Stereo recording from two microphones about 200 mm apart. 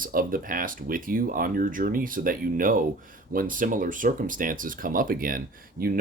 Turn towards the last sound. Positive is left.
turn(degrees=-45)  # may be behind; listen again after turning